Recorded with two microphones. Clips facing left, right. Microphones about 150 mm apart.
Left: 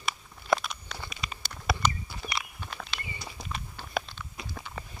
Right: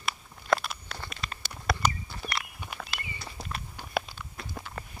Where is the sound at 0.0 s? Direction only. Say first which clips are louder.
Even; centre (ahead or behind).